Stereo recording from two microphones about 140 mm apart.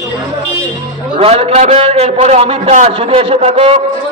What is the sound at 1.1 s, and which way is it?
A man's voice, 45° right (ahead or behind).